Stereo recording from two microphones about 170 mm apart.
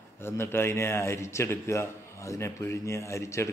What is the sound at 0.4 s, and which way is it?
Speech, 15° left (ahead or behind).